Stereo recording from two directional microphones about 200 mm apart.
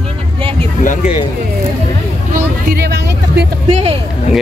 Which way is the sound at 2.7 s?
55° right (ahead or behind).